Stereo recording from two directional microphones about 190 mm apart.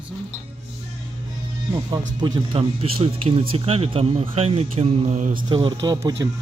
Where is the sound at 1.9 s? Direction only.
20° right (ahead or behind); by 5.3 s 35° right (ahead or behind).